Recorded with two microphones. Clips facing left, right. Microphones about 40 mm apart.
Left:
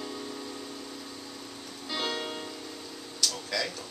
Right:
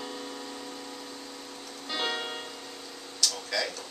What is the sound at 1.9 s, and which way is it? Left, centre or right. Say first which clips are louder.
Music: right 1 dB; centre.